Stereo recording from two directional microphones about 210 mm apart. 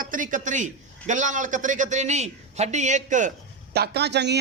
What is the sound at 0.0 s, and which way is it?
A man's voice, 40° right (ahead or behind).